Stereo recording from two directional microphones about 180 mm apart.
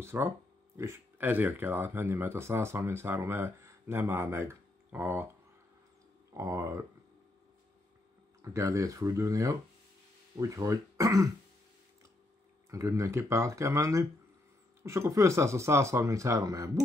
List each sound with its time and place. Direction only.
0.0 s speech: 10° right (ahead or behind)
6.3 s speech: 15° right (ahead or behind)
8.4 s speech: 15° right (ahead or behind)
12.7 s speech: 15° right (ahead or behind)